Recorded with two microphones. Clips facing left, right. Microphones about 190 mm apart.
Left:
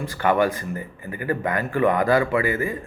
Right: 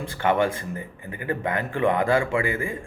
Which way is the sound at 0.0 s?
25° right (ahead or behind).